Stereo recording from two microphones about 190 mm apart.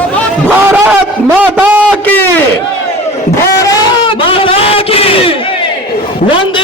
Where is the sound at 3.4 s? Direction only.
20° left (ahead or behind).